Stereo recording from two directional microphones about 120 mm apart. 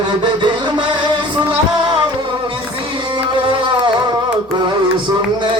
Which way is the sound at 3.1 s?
40° right (ahead or behind).